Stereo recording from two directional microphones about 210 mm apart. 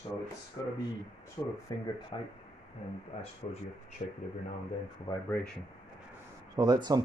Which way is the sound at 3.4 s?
35° left (ahead or behind).